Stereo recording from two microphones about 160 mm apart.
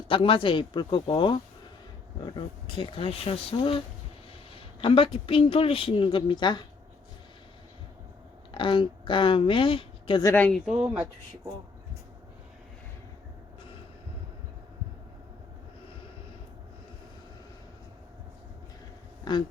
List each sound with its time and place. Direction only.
0.1 s speech: 35° left (ahead or behind)
8.5 s a woman's voice: 30° left (ahead or behind)
10.2 s speech: 10° left (ahead or behind)
10.7 s speech: 10° right (ahead or behind)
19.2 s speech: 25° left (ahead or behind)